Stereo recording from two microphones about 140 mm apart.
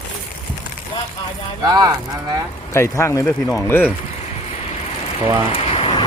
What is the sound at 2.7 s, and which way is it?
Speech, 20° left (ahead or behind).